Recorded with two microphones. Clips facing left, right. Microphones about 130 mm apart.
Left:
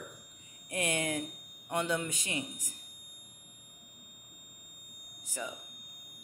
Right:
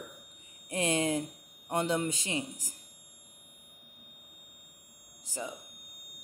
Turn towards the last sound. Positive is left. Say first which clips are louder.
# right 1 dB
turn(degrees=-30)  # may be behind; listen again after turning